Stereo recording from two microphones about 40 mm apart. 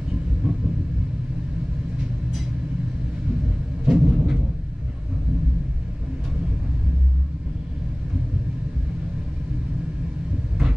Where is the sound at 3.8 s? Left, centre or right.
Centre.